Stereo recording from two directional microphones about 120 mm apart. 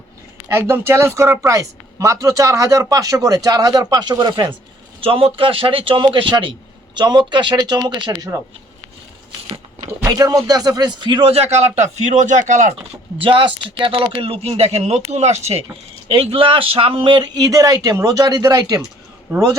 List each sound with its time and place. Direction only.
0.4 s speech: 20° right (ahead or behind); by 4.5 s 35° right (ahead or behind)
4.9 s speech: 50° right (ahead or behind); by 8.3 s 35° right (ahead or behind)
10.0 s speech: 25° right (ahead or behind); by 12.7 s 90° right
13.1 s speech: 45° right (ahead or behind); by 15.6 s 65° right (ahead or behind)
16.0 s speech: 50° right (ahead or behind); by 19.4 s 25° right (ahead or behind)